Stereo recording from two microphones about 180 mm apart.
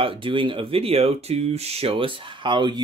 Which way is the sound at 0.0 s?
30° right (ahead or behind).